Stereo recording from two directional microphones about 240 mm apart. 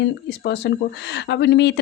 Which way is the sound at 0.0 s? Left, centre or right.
Left.